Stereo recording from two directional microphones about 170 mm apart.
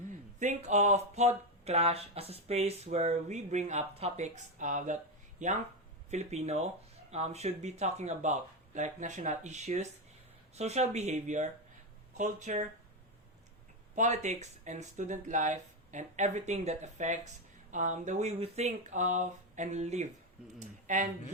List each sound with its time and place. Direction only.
0.1 s speech: 45° right (ahead or behind)
13.9 s speech: 45° right (ahead or behind)